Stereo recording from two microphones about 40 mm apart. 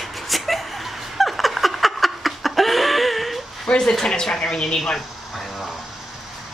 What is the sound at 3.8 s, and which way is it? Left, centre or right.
Speech, centre.